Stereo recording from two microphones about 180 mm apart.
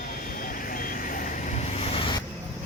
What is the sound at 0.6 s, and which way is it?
Vehicle, 50° left (ahead or behind).